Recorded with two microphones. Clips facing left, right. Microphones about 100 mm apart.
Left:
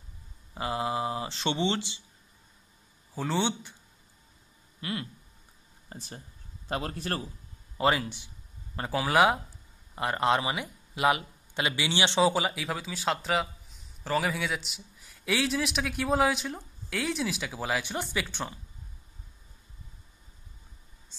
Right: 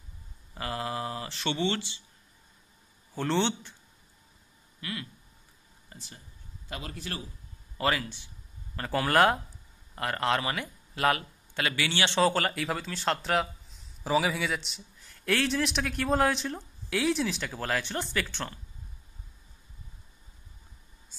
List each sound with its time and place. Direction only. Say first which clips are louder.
0.6 s speech: left 3 dB; 20° left (ahead or behind)
3.2 s speech: right 1 dB; 5° left (ahead or behind)
4.7 s a sound: left 3 dB; 30° left (ahead or behind)
5.9 s a man's voice: left 6 dB; 40° left (ahead or behind)
7.7 s a man's voice: left 3 dB; 20° left (ahead or behind)
8.9 s a man's voice: even; 5° left (ahead or behind)
9.9 s a man's voice: left 2 dB; 20° left (ahead or behind)